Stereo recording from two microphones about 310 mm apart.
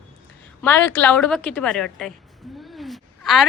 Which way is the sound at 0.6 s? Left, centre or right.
Centre.